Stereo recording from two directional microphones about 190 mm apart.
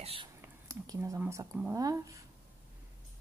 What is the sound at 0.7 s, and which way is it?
Speech, 15° right (ahead or behind).